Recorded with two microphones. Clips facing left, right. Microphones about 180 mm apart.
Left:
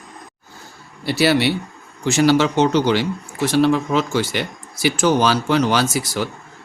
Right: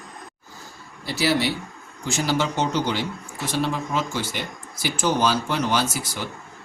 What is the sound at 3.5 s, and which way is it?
Speech, 80° left.